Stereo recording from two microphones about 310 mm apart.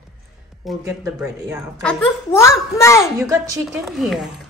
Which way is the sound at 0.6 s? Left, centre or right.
Centre.